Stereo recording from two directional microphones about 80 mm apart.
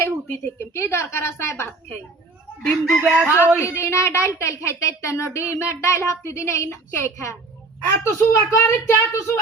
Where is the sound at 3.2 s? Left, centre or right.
Left.